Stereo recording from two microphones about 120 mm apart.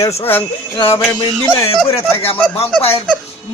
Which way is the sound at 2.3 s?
10° left (ahead or behind).